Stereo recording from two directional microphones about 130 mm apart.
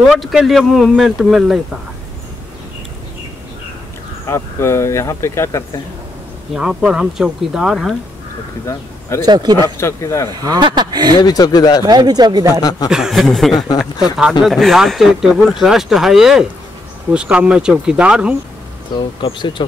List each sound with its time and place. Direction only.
0.1 s speech: 5° right (ahead or behind)
4.3 s speech: 20° left (ahead or behind)
6.5 s speech: 5° right (ahead or behind)
9.2 s speech: 35° right (ahead or behind)
9.8 s speech: 20° left (ahead or behind)
10.4 s speech: 35° right (ahead or behind)
11.1 s speech: 30° left (ahead or behind)
11.8 s speech: 30° right (ahead or behind)
12.6 s speech: 30° left (ahead or behind)
12.9 s speech: 5° right (ahead or behind)
13.7 s speech: 30° left (ahead or behind)
14.4 s speech: centre (ahead or behind)
18.9 s speech: 35° left (ahead or behind)